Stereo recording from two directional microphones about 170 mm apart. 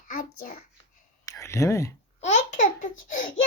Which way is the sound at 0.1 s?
55° left (ahead or behind).